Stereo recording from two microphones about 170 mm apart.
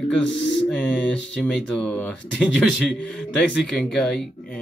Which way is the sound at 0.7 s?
5° left (ahead or behind).